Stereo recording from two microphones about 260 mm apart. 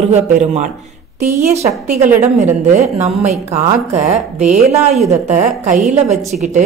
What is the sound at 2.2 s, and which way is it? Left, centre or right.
Speech, right.